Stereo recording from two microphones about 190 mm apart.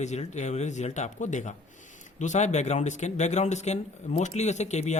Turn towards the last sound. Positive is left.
turn(degrees=35)  # may be behind; listen again after turning